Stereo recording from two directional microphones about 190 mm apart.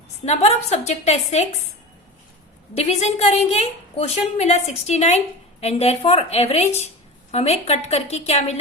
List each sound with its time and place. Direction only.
0.3 s a woman's voice: 35° left (ahead or behind)
2.7 s a woman's voice: 35° left (ahead or behind)